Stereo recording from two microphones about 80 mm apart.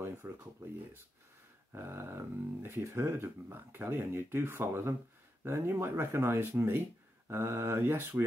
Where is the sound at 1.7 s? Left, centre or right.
Right.